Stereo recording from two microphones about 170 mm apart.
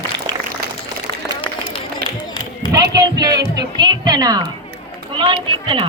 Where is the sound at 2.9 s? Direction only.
20° right (ahead or behind).